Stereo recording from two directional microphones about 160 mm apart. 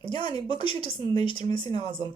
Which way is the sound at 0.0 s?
30° left (ahead or behind).